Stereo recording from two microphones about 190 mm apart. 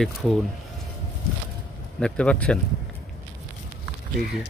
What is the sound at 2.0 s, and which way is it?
Speech, 5° left (ahead or behind).